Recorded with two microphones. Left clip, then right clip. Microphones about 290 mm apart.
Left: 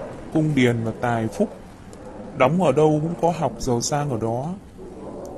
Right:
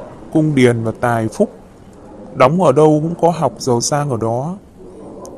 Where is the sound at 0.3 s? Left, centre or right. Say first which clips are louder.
Right 7 dB; right.